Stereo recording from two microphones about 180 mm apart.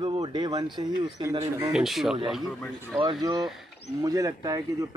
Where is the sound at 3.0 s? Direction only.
25° right (ahead or behind).